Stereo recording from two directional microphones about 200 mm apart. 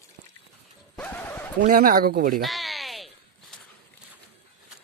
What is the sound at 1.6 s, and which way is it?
Speech, 45° right (ahead or behind).